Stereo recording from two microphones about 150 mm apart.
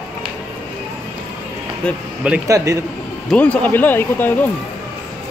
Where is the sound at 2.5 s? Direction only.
20° right (ahead or behind).